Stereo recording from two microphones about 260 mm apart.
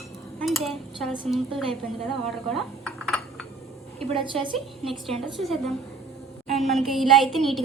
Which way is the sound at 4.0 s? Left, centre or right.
Centre.